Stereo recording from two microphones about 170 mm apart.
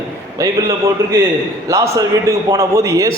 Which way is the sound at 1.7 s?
15° right (ahead or behind).